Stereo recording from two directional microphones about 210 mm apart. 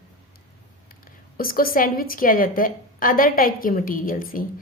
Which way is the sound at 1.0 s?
45° left (ahead or behind).